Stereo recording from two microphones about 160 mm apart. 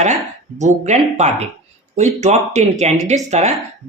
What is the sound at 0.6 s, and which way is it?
Speech, 45° right (ahead or behind).